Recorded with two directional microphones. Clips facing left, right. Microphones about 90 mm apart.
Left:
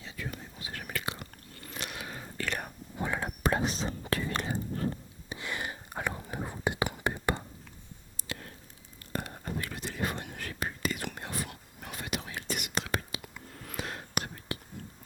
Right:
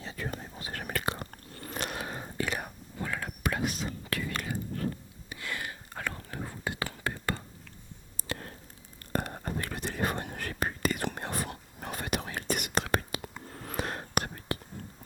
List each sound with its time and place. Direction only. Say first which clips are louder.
0.0 s chewing: right 3 dB; 40° right (ahead or behind)
3.0 s whispering: left 3 dB; 25° left (ahead or behind)
8.1 s a sound: right 4 dB; 40° right (ahead or behind)
9.1 s whispering: right 3 dB; 50° right (ahead or behind)